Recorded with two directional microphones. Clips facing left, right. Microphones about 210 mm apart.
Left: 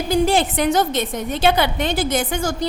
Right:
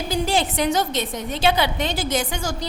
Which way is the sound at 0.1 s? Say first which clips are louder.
Left 6 dB; 55° left (ahead or behind).